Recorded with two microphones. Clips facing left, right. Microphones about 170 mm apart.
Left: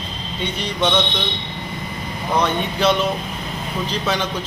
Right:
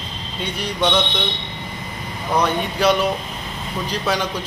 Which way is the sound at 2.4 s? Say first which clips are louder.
Even; 10° right (ahead or behind).